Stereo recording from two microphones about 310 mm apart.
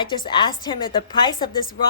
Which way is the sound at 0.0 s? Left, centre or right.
Centre.